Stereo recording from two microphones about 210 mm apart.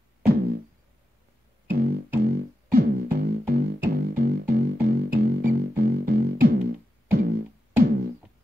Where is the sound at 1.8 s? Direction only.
45° right (ahead or behind).